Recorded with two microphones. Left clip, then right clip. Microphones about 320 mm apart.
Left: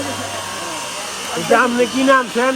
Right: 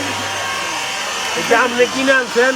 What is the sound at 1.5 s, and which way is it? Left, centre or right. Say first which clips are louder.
Speech: even; left.